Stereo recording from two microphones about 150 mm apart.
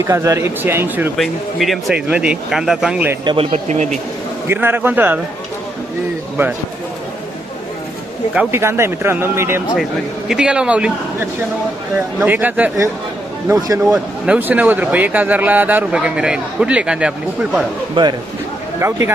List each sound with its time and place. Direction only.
0.0 s speech: 20° right (ahead or behind)
1.1 s speech: centre (ahead or behind)
3.2 s speech: 35° right (ahead or behind)
4.4 s a man's voice: 15° right (ahead or behind)
8.3 s a man's voice: 10° right (ahead or behind)
10.2 s a man's voice: 5° right (ahead or behind)
13.8 s a man's voice: 5° right (ahead or behind)
18.8 s a man's voice: 15° right (ahead or behind)